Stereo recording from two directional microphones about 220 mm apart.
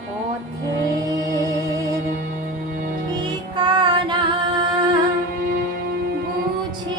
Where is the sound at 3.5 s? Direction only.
20° right (ahead or behind).